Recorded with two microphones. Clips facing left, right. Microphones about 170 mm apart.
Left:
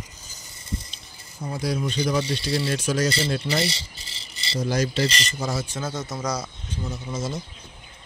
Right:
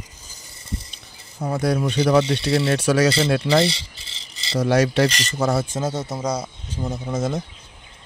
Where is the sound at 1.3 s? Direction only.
65° right (ahead or behind); by 6.7 s 25° right (ahead or behind).